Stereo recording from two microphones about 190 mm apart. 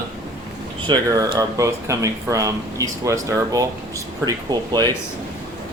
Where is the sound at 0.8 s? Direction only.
20° right (ahead or behind).